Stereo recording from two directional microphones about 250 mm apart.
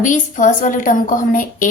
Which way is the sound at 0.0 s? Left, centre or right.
Left.